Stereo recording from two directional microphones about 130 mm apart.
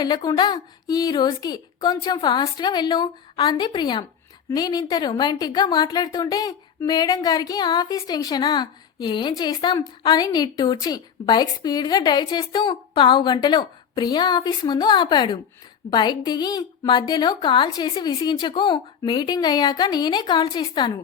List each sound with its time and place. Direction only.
0.0 s a woman's voice: 30° left (ahead or behind)